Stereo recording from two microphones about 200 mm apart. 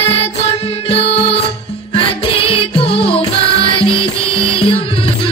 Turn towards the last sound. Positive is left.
turn(degrees=25)  # may be behind; listen again after turning